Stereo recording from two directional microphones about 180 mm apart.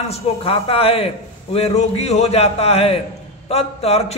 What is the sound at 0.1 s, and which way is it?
A man's voice, 30° left (ahead or behind).